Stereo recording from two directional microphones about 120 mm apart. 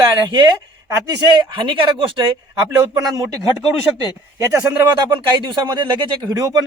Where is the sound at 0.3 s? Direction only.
35° right (ahead or behind).